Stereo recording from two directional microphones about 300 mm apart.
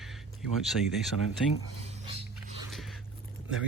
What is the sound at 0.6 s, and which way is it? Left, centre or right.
Speech, centre.